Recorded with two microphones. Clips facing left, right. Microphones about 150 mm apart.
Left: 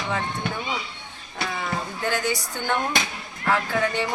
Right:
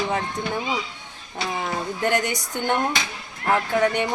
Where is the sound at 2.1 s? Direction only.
20° right (ahead or behind).